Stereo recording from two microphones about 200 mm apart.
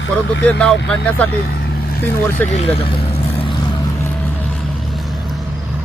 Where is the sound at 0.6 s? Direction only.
5° left (ahead or behind).